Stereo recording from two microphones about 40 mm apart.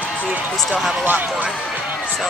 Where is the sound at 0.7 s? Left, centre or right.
Centre.